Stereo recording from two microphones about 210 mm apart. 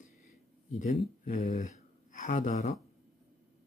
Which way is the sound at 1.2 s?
35° left (ahead or behind).